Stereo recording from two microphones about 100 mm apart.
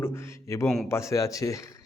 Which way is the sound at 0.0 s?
25° left (ahead or behind).